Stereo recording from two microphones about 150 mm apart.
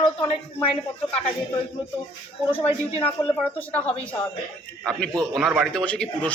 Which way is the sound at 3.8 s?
40° left (ahead or behind).